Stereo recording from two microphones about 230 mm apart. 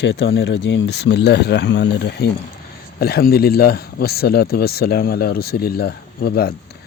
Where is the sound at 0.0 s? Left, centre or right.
Left.